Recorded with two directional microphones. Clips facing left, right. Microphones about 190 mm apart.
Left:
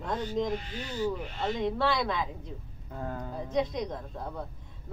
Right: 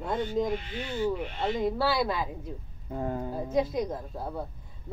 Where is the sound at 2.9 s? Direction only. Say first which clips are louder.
Right 5 dB; 20° right (ahead or behind).